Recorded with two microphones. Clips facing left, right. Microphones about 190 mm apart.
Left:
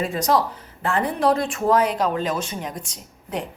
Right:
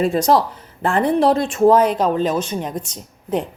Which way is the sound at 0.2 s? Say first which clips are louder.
Right 4 dB; 30° right (ahead or behind).